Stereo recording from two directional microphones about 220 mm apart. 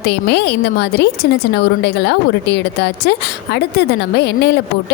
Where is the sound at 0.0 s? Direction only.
50° left (ahead or behind).